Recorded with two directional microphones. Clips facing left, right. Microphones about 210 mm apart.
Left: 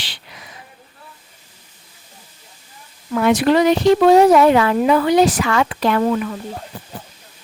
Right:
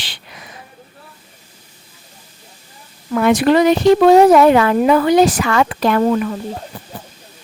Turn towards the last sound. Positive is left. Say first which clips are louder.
# right 3 dB
turn(degrees=-40)  # may be behind; listen again after turning